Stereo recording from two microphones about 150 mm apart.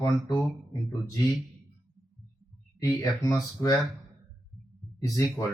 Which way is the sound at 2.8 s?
25° left (ahead or behind).